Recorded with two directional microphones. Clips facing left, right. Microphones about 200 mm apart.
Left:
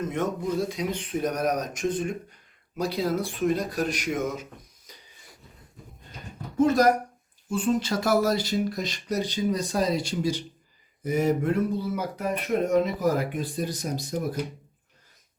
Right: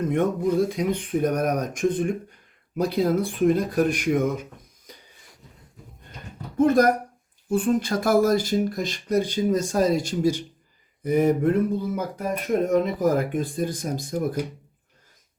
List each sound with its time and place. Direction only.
0.1 s speech: 55° right (ahead or behind)
6.6 s speech: 55° right (ahead or behind)